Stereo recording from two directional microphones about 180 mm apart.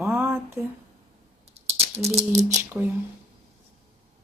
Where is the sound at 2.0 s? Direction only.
35° right (ahead or behind).